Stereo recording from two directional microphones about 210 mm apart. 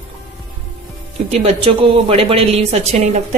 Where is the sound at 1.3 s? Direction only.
30° right (ahead or behind).